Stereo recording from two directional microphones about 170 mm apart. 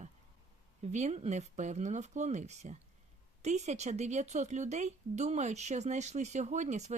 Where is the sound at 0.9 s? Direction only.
40° right (ahead or behind).